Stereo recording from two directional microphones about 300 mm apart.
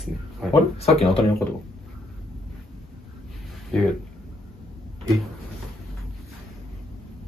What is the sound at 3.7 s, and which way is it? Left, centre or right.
Speech, centre.